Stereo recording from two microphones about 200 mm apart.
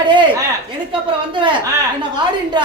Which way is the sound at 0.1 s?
25° right (ahead or behind).